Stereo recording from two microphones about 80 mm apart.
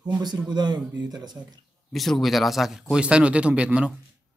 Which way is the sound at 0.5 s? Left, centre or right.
Right.